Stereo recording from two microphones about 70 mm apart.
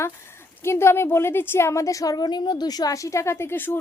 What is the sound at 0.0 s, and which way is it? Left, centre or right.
A woman's voice, left.